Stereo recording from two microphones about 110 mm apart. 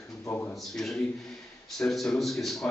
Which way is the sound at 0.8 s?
5° left (ahead or behind).